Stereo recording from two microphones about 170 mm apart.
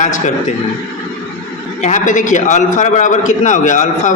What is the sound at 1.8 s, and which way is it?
A man's voice, 50° left (ahead or behind).